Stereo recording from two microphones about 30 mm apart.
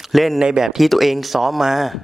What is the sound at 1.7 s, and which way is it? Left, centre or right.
Speech, centre.